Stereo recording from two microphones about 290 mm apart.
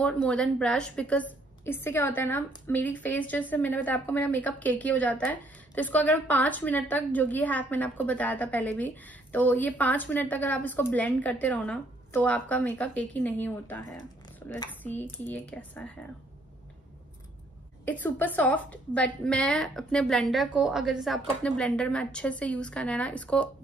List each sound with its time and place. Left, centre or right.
0.0 s a woman's voice: centre
17.8 s a woman's voice: centre